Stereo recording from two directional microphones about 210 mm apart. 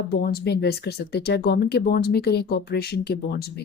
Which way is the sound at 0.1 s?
45° left (ahead or behind).